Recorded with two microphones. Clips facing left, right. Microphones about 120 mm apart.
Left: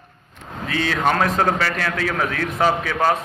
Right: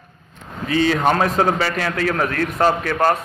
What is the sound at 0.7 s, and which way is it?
Speech, 90° left.